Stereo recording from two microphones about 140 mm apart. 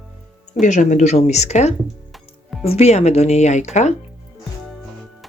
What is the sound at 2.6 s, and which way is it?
Speech, 50° left (ahead or behind).